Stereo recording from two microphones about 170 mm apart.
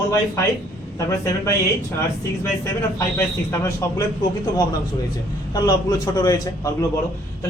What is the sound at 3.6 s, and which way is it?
Speech, 15° left (ahead or behind).